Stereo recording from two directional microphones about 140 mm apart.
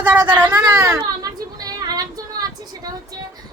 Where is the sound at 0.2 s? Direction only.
30° right (ahead or behind).